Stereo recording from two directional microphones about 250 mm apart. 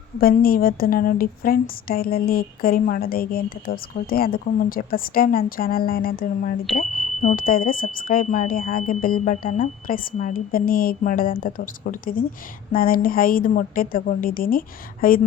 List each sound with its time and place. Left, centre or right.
0.2 s a woman's voice: left